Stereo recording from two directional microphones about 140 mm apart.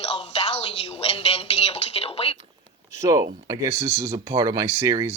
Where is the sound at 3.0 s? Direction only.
25° right (ahead or behind).